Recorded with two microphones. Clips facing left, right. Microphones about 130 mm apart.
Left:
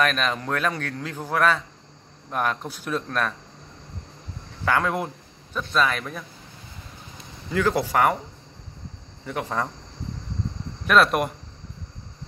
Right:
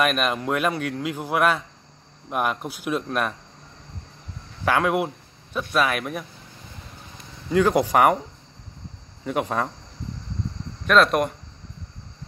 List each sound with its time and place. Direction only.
0.0 s a man's voice: 10° right (ahead or behind)
4.6 s speech: 10° right (ahead or behind)
7.5 s a man's voice: 15° right (ahead or behind)
9.2 s a man's voice: 20° right (ahead or behind)
10.9 s speech: 5° left (ahead or behind)